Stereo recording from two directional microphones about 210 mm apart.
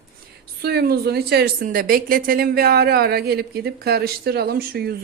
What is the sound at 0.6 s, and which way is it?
A woman's voice, 50° right (ahead or behind).